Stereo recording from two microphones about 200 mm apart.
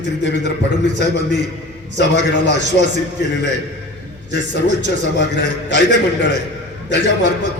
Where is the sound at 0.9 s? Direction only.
60° left (ahead or behind).